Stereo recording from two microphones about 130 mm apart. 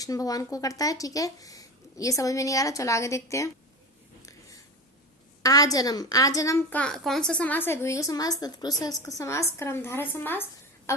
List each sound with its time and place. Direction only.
0.0 s speech: 30° left (ahead or behind)
5.4 s speech: 30° left (ahead or behind)
6.7 s speech: 10° left (ahead or behind)